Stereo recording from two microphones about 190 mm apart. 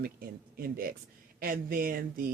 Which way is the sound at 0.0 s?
50° right (ahead or behind).